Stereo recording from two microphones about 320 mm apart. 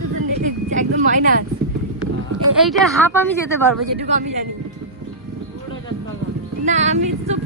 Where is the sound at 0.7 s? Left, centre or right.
Right.